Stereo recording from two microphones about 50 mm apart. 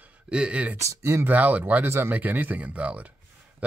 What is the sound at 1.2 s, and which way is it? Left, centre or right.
Speech, right.